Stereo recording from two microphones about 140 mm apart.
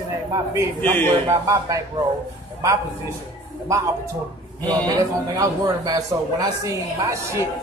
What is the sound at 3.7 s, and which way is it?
Speech, 20° right (ahead or behind).